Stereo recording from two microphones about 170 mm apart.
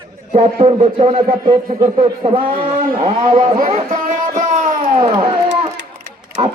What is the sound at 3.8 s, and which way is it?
Music, 50° right (ahead or behind).